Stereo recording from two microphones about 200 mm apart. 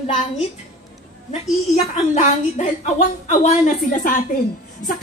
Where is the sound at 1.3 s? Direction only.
35° left (ahead or behind).